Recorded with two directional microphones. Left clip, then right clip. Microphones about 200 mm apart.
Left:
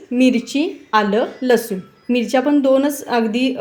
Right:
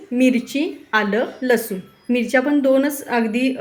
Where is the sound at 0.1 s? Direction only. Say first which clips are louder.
Left 2 dB; 20° left (ahead or behind).